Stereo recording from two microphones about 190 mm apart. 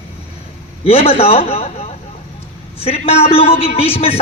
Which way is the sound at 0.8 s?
30° left (ahead or behind).